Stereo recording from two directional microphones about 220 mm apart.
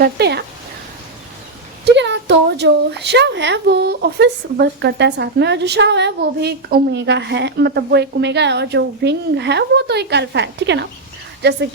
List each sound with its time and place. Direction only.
0.0 s a woman's voice: 50° right (ahead or behind)
1.8 s a woman's voice: 50° right (ahead or behind)